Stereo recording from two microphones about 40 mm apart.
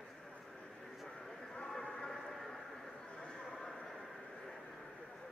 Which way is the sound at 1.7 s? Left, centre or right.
Centre.